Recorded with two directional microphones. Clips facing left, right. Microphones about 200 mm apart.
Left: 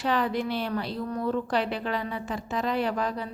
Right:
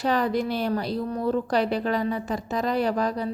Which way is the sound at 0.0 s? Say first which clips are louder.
Right 3 dB; 40° right (ahead or behind).